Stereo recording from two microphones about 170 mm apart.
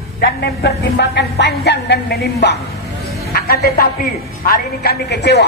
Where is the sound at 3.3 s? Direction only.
65° left (ahead or behind).